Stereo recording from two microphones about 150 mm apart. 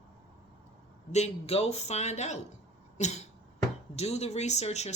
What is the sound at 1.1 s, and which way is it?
A woman's voice, 45° left (ahead or behind).